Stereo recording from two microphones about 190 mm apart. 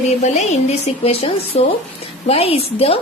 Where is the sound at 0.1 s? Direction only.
35° left (ahead or behind).